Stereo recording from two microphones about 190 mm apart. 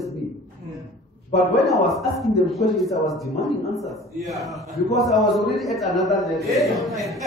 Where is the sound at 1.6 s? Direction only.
Centre (ahead or behind).